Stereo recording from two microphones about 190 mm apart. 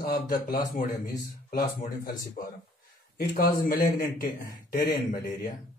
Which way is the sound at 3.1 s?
50° left (ahead or behind).